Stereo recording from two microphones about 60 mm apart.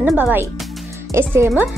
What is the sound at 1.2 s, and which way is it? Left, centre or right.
Speech, right.